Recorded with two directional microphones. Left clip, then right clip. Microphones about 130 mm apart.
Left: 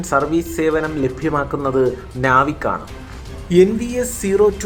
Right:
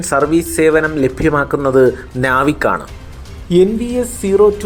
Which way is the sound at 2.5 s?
35° right (ahead or behind).